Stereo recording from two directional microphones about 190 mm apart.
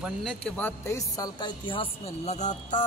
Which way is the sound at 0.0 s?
Centre (ahead or behind).